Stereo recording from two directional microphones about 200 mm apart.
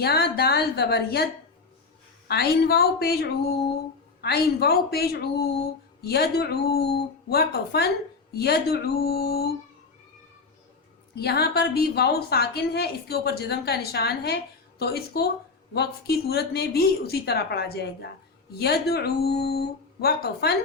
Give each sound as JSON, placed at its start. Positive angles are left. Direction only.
{"t": 0.0, "sound": "a woman's voice", "side_deg": 50}
{"t": 11.1, "sound": "a woman's voice", "side_deg": 55}